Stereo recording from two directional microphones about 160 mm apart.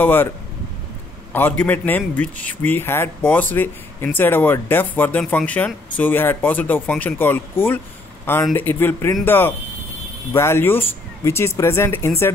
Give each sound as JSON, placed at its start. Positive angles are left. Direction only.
{"t": 0.0, "sound": "speech", "side_deg": 15}
{"t": 1.3, "sound": "speech", "side_deg": 10}